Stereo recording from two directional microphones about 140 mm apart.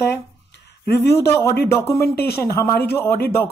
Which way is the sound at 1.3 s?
20° left (ahead or behind).